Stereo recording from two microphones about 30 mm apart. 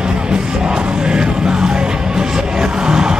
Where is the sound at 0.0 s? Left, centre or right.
Right.